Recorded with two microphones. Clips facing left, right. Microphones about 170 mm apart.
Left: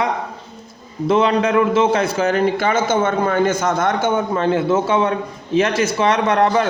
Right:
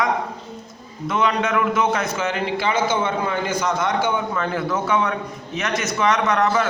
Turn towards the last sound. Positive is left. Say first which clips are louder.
# left 3 dB
turn(degrees=30)  # may be behind; listen again after turning